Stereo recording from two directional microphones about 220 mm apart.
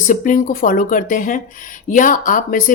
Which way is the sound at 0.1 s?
35° left (ahead or behind).